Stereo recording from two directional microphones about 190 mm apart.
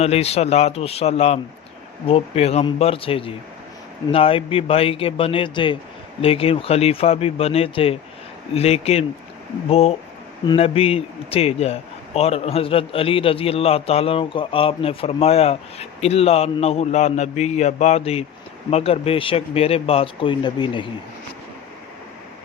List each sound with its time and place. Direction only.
0.0 s a man's voice: 35° left (ahead or behind)